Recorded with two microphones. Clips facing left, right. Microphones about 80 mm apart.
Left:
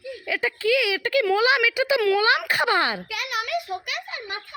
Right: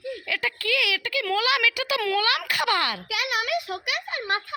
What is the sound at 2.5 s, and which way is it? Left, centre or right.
Speech, left.